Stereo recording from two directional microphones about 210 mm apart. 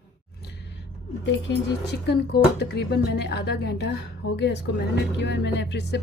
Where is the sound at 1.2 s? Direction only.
55° left (ahead or behind).